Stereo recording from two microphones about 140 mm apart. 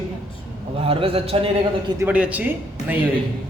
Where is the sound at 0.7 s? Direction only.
40° right (ahead or behind).